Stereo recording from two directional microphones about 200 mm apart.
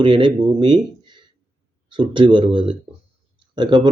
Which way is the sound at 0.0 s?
25° right (ahead or behind).